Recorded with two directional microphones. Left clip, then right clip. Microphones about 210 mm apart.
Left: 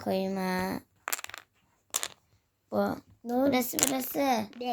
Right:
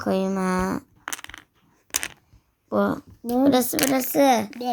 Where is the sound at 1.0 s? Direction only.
15° left (ahead or behind).